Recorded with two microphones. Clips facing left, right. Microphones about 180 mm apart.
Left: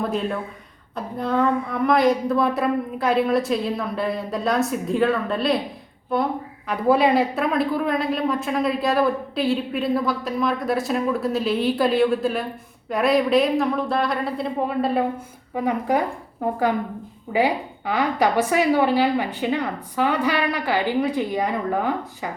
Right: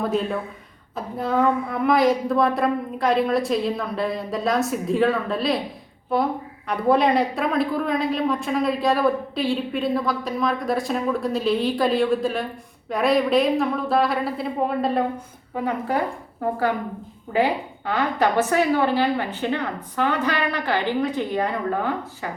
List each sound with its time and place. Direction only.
0.0 s a woman's voice: centre (ahead or behind)
6.7 s a woman's voice: 5° left (ahead or behind)
15.5 s a woman's voice: 15° left (ahead or behind)